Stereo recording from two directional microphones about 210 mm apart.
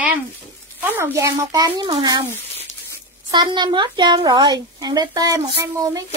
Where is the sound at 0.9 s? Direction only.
10° right (ahead or behind).